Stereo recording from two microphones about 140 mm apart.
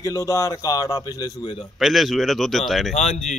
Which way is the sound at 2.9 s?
55° left (ahead or behind).